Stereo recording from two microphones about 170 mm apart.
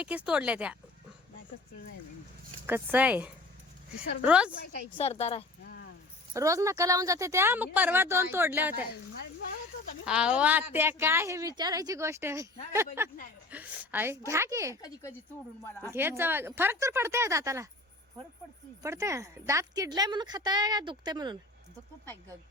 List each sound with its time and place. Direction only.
0.0 s a woman's voice: 5° right (ahead or behind)
2.6 s a woman's voice: 10° right (ahead or behind)
4.9 s a woman's voice: 35° left (ahead or behind)
5.6 s keys jangling: 65° left (ahead or behind)
6.3 s a woman's voice: 20° right (ahead or behind)
10.1 s a woman's voice: 5° right (ahead or behind)
14.8 s speech: 20° left (ahead or behind)
15.9 s a woman's voice: 15° right (ahead or behind)
18.8 s a woman's voice: 15° right (ahead or behind)